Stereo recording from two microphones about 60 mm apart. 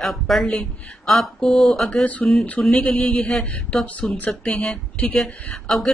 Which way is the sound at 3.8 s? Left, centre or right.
Left.